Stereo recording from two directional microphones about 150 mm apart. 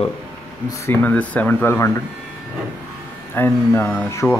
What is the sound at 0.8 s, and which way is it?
Speech, 15° left (ahead or behind).